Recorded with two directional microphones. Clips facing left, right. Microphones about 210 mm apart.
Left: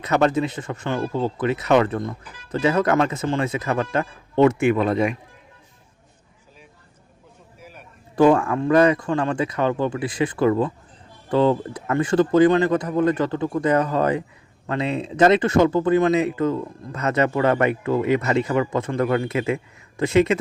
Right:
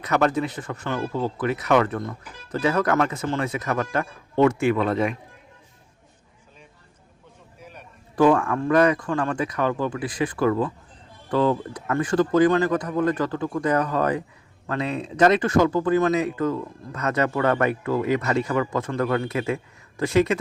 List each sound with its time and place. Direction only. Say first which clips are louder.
0.0 s speech: left 2 dB; 25° left (ahead or behind)
7.6 s a sound: even; 5° left (ahead or behind)
8.1 s speech: left 2 dB; 25° left (ahead or behind)